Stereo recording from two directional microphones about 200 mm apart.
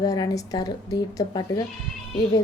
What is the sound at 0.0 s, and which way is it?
A woman's voice, 20° left (ahead or behind).